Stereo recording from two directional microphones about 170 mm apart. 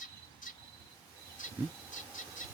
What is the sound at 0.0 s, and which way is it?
Cricket, 50° left (ahead or behind).